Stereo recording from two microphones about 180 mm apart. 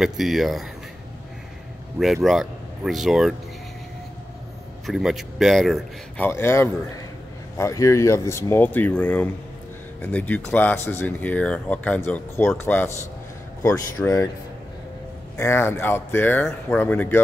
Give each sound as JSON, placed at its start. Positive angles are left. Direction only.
{"t": 0.0, "sound": "speech", "side_deg": 0}
{"t": 2.2, "sound": "speech", "side_deg": 0}
{"t": 4.8, "sound": "speech", "side_deg": 0}
{"t": 6.2, "sound": "speech", "side_deg": 15}
{"t": 15.3, "sound": "speech", "side_deg": 15}